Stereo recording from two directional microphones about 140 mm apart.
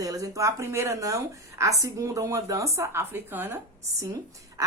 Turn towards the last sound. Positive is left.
turn(degrees=-25)  # may be behind; listen again after turning